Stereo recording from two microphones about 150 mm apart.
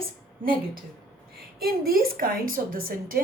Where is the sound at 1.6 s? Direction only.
80° right.